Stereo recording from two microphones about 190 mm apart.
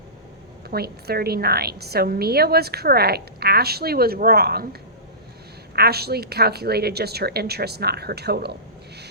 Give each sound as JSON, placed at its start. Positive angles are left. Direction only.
{"t": 0.7, "sound": "a woman's voice", "side_deg": -55}